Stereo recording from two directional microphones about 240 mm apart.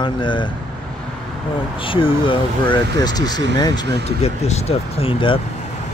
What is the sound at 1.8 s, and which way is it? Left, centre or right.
Speech, left.